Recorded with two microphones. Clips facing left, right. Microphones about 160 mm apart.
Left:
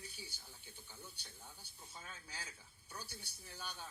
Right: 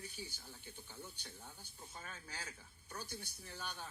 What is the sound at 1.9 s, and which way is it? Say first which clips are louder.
Speech: right 2 dB; 55° right (ahead or behind).